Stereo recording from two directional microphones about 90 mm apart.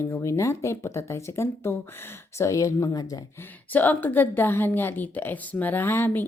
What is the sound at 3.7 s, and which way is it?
A woman's voice, 20° left (ahead or behind).